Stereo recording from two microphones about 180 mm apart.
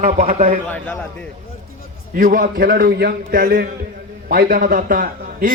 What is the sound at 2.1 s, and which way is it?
A man's voice, 50° right (ahead or behind).